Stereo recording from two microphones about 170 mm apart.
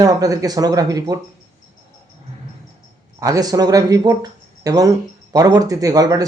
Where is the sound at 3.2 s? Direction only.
20° right (ahead or behind).